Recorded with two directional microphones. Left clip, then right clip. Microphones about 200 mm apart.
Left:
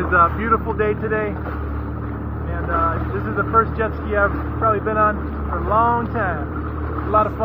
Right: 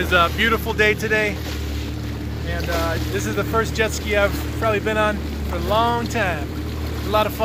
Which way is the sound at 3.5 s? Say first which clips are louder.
Left 3 dB; 35° right (ahead or behind).